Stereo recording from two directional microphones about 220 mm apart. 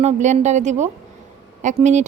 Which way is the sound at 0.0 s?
30° right (ahead or behind).